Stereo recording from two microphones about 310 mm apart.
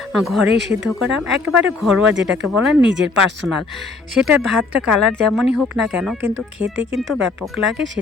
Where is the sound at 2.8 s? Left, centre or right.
Right.